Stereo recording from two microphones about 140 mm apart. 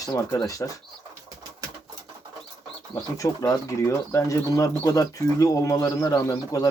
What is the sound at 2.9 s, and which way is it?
Speech, 25° left (ahead or behind).